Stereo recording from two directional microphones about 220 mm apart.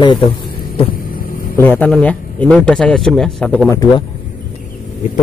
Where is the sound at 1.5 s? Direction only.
10° left (ahead or behind).